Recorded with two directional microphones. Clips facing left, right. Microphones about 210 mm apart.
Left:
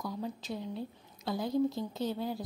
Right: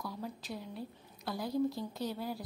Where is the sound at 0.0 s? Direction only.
20° left (ahead or behind).